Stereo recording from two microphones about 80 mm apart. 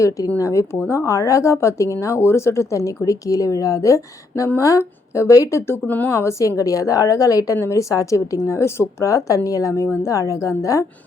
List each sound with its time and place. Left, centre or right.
0.3 s speech: left
6.6 s speech: left